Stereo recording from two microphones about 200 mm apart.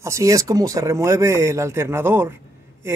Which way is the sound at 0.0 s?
15° right (ahead or behind).